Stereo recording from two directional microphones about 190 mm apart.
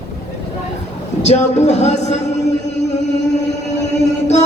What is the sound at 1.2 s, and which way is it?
Music, 35° left (ahead or behind).